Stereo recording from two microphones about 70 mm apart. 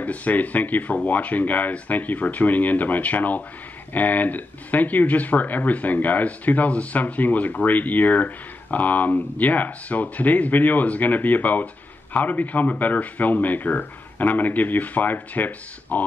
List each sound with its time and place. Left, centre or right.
0.0 s speech: left